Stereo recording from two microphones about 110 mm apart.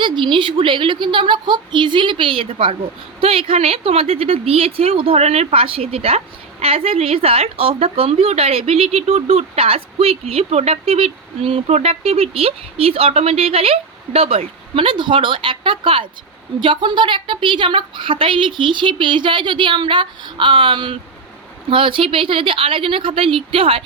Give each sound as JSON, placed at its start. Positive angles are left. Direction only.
{"t": 0.0, "sound": "a woman's voice", "side_deg": -50}